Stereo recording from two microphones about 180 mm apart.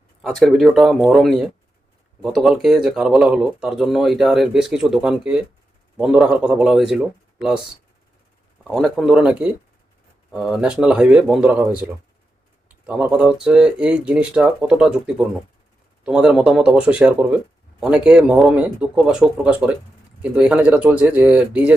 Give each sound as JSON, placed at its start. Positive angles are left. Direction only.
{"t": 0.2, "sound": "speech", "side_deg": 0}
{"t": 8.6, "sound": "speech", "side_deg": 0}
{"t": 12.6, "sound": "speech", "side_deg": -10}